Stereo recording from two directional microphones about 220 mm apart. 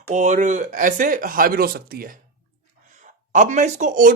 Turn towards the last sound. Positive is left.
turn(degrees=-35)  # may be behind; listen again after turning